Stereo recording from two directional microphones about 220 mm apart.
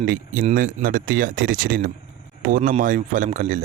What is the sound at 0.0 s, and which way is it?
Speech, 40° right (ahead or behind).